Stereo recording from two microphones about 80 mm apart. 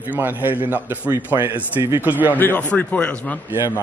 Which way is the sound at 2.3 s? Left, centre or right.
Left.